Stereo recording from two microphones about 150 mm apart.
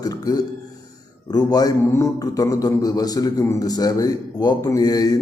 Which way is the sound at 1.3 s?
25° left (ahead or behind).